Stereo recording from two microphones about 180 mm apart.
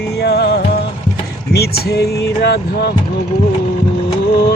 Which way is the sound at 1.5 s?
60° left (ahead or behind).